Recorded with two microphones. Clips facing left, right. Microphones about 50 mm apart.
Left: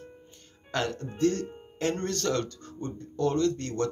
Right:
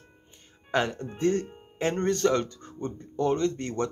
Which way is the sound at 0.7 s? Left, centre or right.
Right.